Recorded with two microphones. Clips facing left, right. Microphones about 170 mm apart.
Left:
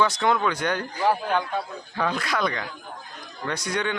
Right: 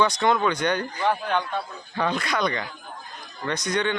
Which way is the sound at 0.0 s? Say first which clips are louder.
Right 1 dB; 5° left (ahead or behind).